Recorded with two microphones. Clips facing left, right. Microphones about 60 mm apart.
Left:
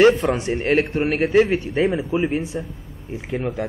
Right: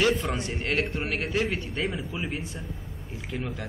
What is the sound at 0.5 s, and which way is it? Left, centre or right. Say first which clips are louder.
A man's voice: left 10 dB; left.